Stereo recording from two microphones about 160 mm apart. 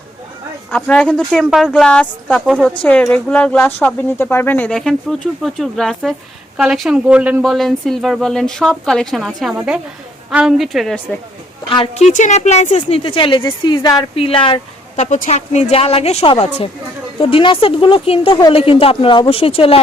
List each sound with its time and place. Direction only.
0.7 s speech: 10° left (ahead or behind)
11.9 s a woman's voice: 45° left (ahead or behind); by 15.0 s 30° left (ahead or behind)
15.0 s a woman's voice: 50° left (ahead or behind)